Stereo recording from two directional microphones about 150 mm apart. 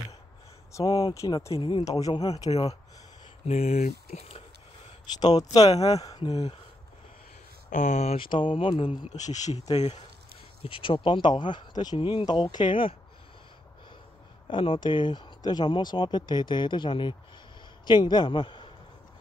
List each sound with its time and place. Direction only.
0.7 s speech: 25° left (ahead or behind)
1.6 s speech: 30° left (ahead or behind)
2.1 s speech: 40° left (ahead or behind)
3.4 s speech: 45° left (ahead or behind)
5.2 s speech: 25° left (ahead or behind)
7.7 s speech: 55° left (ahead or behind)
8.2 s speech: 35° left (ahead or behind)
9.1 s speech: 50° left (ahead or behind)
10.6 s speech: 35° left (ahead or behind)
14.5 s speech: 35° left (ahead or behind)